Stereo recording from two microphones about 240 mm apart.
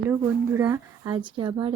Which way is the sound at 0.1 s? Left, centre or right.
Centre.